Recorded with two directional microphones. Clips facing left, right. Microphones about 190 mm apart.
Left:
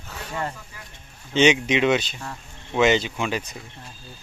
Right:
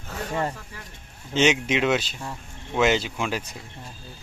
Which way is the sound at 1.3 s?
5° right (ahead or behind).